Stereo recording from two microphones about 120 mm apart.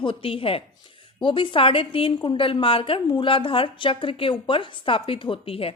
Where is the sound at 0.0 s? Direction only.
45° left (ahead or behind).